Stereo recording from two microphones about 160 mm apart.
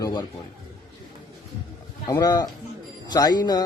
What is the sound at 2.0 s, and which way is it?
Speech, 20° left (ahead or behind).